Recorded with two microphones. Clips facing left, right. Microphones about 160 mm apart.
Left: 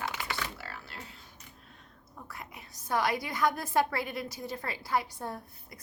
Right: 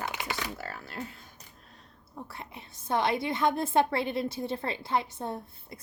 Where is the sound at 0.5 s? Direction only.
45° right (ahead or behind).